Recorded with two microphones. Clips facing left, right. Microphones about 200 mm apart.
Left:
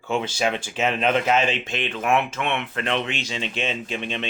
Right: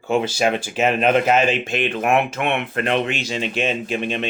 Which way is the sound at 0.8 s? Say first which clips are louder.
Right 4 dB; 45° right (ahead or behind).